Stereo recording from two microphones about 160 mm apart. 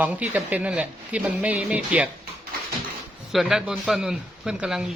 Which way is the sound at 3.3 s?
Centre (ahead or behind).